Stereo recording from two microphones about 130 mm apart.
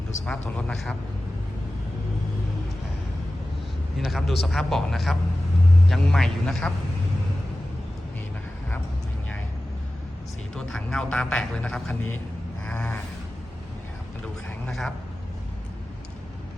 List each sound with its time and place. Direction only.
0.3 s speech: 5° left (ahead or behind)
3.9 s speech: centre (ahead or behind)
10.5 s speech: 5° left (ahead or behind)
12.6 s a sound: 10° left (ahead or behind)
14.7 s speech: centre (ahead or behind)